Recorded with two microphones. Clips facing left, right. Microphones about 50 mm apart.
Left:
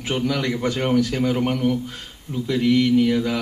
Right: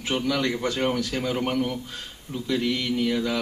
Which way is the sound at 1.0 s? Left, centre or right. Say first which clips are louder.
Left 6 dB; left.